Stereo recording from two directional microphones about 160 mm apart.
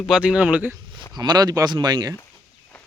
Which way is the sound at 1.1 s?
25° right (ahead or behind).